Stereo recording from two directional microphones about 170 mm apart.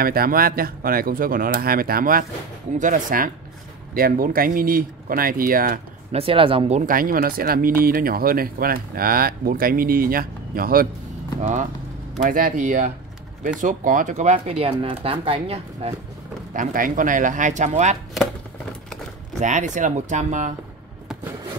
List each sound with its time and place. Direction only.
0.0 s speech: 60° right (ahead or behind)
6.1 s speech: 30° right (ahead or behind)
6.9 s speech: 55° right (ahead or behind)
12.2 s speech: 55° right (ahead or behind); by 15.9 s 35° right (ahead or behind)
16.5 s speech: 50° right (ahead or behind)
19.4 s speech: 45° right (ahead or behind)